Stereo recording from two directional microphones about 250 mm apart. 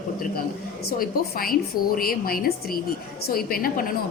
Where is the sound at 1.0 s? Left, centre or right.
Left.